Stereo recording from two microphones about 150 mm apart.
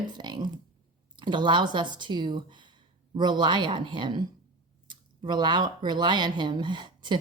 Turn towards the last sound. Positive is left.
turn(degrees=-30)  # may be behind; listen again after turning